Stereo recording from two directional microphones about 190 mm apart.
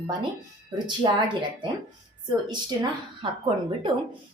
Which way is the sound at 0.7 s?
25° right (ahead or behind).